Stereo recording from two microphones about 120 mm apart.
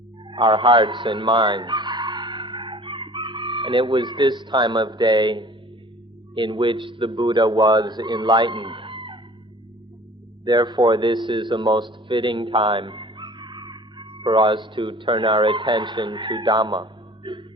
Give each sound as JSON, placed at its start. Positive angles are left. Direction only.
{"t": 0.3, "sound": "fowl", "side_deg": -45}
{"t": 6.3, "sound": "speech", "side_deg": -40}
{"t": 10.4, "sound": "speech", "side_deg": -35}